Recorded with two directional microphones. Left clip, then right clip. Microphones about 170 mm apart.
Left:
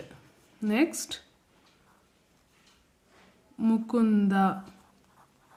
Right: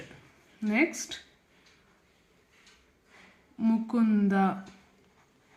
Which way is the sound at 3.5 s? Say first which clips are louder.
Left 2 dB; 30° left (ahead or behind).